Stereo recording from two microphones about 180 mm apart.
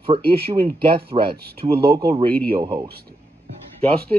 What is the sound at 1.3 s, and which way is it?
Speech, 60° right (ahead or behind).